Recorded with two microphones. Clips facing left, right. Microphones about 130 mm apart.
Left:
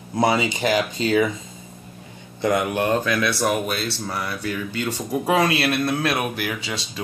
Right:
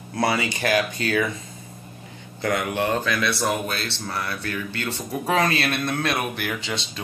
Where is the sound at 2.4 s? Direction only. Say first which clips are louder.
Left 3 dB; 20° left (ahead or behind).